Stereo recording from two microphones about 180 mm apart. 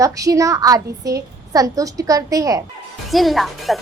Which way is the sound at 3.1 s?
Centre (ahead or behind).